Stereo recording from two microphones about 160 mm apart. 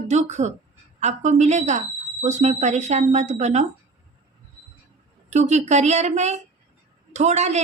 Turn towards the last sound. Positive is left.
turn(degrees=-45)  # may be behind; listen again after turning